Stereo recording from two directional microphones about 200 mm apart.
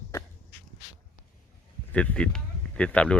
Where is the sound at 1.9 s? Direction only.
5° left (ahead or behind).